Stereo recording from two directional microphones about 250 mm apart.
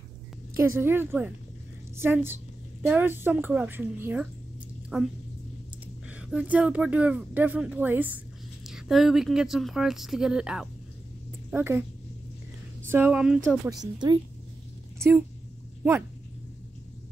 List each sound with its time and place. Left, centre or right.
0.6 s a woman's voice: centre
12.9 s speech: centre
13.9 s speech: centre
15.0 s speech: centre